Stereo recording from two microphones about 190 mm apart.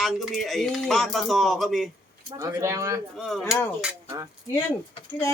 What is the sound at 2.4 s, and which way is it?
Speech, 15° right (ahead or behind).